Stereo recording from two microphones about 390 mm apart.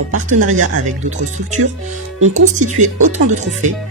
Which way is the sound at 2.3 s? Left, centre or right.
Centre.